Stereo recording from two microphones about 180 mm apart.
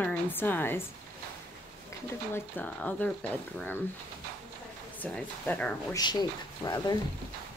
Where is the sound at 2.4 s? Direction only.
10° left (ahead or behind).